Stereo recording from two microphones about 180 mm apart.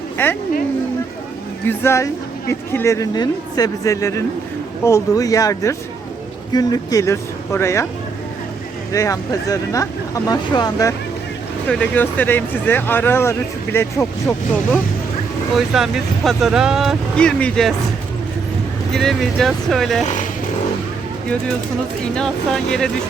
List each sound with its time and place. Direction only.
0.2 s speech: 10° left (ahead or behind)
1.6 s speech: 15° left (ahead or behind)
8.9 s speech: 20° left (ahead or behind)
11.7 s speech: 10° left (ahead or behind)
15.5 s speech: centre (ahead or behind)
18.9 s speech: centre (ahead or behind)
22.0 s speech: 5° left (ahead or behind)